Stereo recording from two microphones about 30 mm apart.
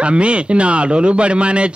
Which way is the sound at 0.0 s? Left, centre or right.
Right.